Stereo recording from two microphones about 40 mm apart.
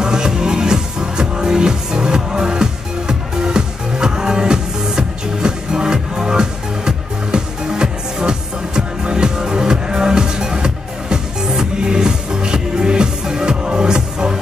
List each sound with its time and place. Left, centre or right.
0.0 s music: centre